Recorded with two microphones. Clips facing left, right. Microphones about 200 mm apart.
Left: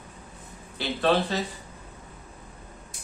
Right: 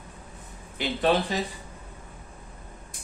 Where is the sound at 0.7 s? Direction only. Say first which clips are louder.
Even; 15° right (ahead or behind).